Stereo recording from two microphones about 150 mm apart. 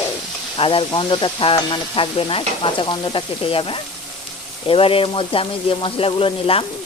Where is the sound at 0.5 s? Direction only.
35° left (ahead or behind).